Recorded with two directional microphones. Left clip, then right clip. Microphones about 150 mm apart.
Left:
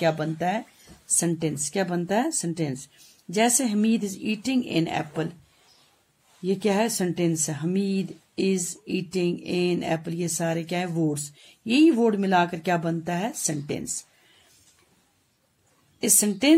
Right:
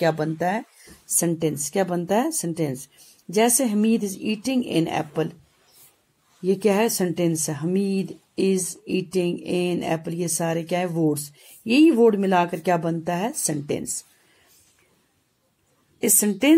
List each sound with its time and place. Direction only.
0.0 s a woman's voice: 20° right (ahead or behind)
6.4 s speech: 20° right (ahead or behind)
16.0 s a woman's voice: 5° right (ahead or behind)